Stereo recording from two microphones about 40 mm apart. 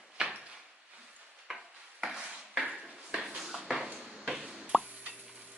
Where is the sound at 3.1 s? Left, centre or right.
Centre.